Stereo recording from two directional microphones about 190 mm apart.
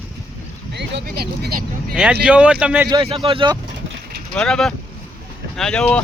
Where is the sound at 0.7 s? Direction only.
60° right (ahead or behind).